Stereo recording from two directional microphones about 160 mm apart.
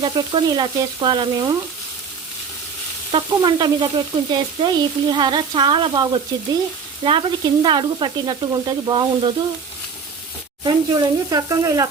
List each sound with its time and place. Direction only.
0.0 s sizzle: 25° right (ahead or behind)
3.1 s frying: 30° right (ahead or behind)
4.3 s sizzle: 30° right (ahead or behind)
10.6 s sizzle: 25° right (ahead or behind)